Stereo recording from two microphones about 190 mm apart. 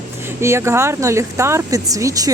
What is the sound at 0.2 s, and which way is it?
Speech, 15° right (ahead or behind).